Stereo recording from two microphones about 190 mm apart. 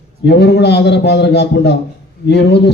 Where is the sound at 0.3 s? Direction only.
60° left (ahead or behind).